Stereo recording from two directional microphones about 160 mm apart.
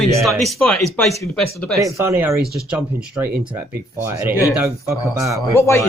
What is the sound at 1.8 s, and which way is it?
Speech, 15° right (ahead or behind).